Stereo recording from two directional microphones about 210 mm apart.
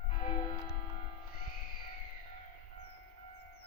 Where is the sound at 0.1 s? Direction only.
25° left (ahead or behind).